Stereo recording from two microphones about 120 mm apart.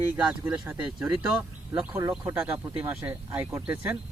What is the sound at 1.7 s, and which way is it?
Speech, 30° right (ahead or behind).